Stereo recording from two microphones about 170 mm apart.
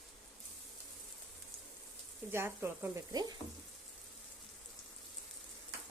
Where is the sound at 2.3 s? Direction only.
15° right (ahead or behind).